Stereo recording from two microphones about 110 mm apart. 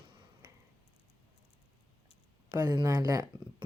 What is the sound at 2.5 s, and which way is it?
Speech, 40° right (ahead or behind).